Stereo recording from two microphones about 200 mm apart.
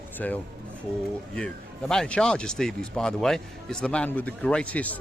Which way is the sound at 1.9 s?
5° left (ahead or behind).